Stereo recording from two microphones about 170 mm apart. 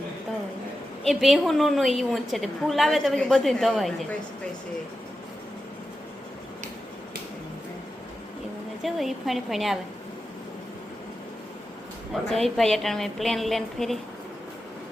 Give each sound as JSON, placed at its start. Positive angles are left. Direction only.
{"t": 1.0, "sound": "a woman's voice", "side_deg": 0}
{"t": 8.8, "sound": "a woman's voice", "side_deg": 0}
{"t": 12.1, "sound": "a woman's voice", "side_deg": 0}